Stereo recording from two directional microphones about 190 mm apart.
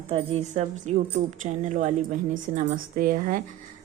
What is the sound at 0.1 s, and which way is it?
A woman's voice, 35° right (ahead or behind).